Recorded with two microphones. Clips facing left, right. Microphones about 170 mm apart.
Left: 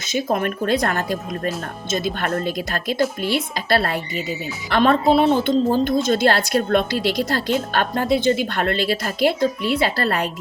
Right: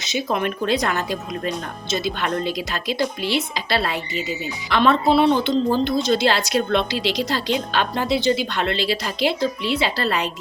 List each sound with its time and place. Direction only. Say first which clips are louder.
0.0 s a woman's voice: left 2 dB; 50° left (ahead or behind)
2.1 s a woman's voice: left 1 dB; 50° left (ahead or behind)